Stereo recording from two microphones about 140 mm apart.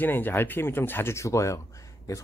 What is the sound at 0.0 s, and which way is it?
Speech, 15° left (ahead or behind).